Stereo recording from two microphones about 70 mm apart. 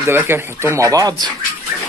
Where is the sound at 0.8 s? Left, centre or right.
Right.